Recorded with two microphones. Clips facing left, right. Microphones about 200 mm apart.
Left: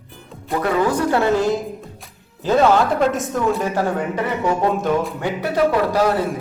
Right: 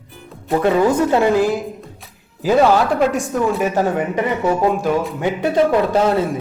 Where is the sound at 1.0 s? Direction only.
15° right (ahead or behind).